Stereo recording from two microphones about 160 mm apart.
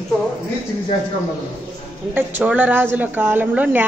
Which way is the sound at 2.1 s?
10° right (ahead or behind).